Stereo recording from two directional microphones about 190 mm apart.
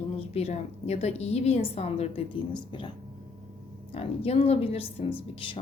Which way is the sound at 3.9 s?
30° left (ahead or behind).